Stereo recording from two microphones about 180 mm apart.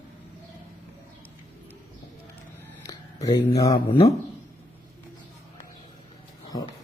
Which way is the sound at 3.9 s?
35° left (ahead or behind).